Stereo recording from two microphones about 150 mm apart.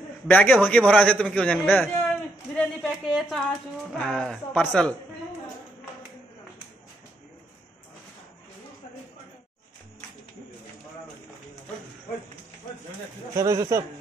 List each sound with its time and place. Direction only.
0.3 s a man's voice: 10° left (ahead or behind)
13.4 s speech: 20° right (ahead or behind)